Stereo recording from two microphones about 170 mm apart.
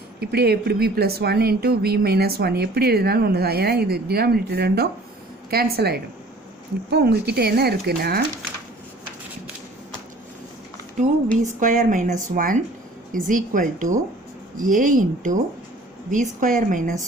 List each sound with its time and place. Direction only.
0.2 s a woman's voice: 70° right (ahead or behind)
11.4 s speech: 50° right (ahead or behind)